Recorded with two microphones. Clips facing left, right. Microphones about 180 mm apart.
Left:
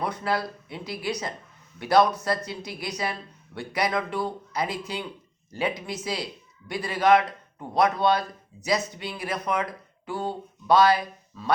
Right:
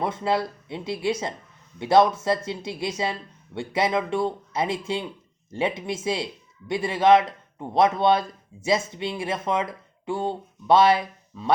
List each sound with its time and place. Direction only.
0.0 s speech: 25° right (ahead or behind)